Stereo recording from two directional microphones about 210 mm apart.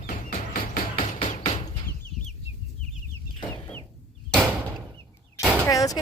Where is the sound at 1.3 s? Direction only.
30° left (ahead or behind).